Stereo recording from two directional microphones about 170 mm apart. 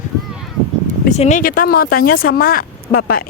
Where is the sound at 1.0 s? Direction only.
45° left (ahead or behind).